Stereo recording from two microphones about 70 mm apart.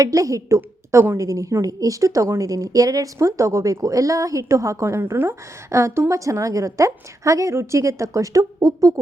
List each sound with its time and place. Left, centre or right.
0.0 s a woman's voice: right